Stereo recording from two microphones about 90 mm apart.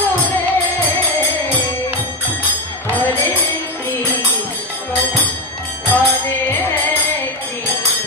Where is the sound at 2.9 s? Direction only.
20° left (ahead or behind).